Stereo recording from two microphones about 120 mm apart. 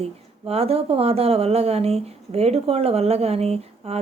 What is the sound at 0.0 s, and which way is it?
Speech, 55° right (ahead or behind).